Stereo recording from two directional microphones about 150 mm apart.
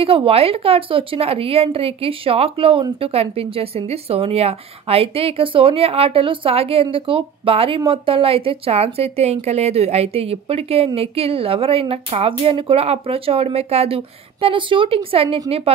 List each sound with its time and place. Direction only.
0.0 s speech: 40° right (ahead or behind)